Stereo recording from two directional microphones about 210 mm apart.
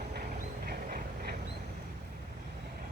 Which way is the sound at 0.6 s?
45° right (ahead or behind).